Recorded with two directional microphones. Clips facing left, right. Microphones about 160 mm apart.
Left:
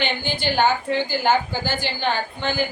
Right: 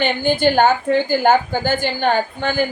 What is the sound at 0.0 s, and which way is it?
A woman's voice, 50° right (ahead or behind).